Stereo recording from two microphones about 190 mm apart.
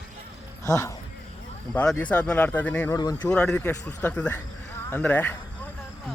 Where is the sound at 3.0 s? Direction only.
20° left (ahead or behind).